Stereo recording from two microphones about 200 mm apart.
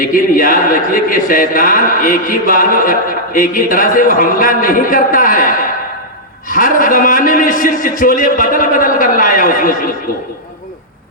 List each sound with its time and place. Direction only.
0.0 s a man's voice: 45° left (ahead or behind)